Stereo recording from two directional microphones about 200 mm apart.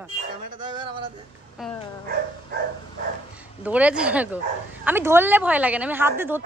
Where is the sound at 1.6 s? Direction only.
Centre (ahead or behind).